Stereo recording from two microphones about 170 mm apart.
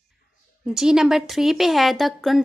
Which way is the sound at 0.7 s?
5° right (ahead or behind).